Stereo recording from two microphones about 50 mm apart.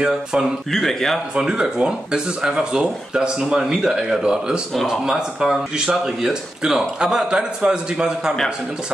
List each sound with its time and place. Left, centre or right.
0.0 s speech: centre
0.7 s speech: centre
1.3 s speech: centre